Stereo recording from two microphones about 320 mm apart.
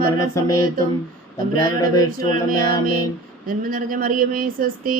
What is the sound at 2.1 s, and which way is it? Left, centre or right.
Speech, right.